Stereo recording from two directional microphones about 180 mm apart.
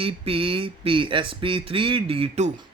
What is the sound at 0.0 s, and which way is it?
Speech, 30° right (ahead or behind).